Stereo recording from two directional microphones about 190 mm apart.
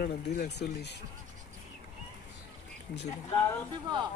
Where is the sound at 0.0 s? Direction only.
55° left (ahead or behind).